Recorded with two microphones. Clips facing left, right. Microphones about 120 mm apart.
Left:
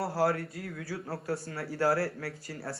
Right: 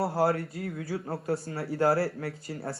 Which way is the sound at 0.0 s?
25° right (ahead or behind).